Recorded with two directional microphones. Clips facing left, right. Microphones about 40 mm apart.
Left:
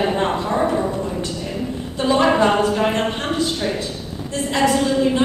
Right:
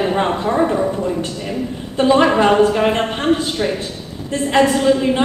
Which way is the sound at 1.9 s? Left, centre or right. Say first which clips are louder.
Right 3 dB; right.